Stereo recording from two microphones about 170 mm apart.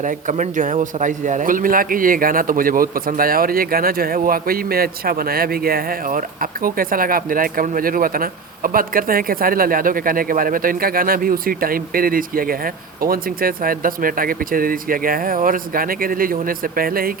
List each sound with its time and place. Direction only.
0.0 s a man's voice: 50° right (ahead or behind)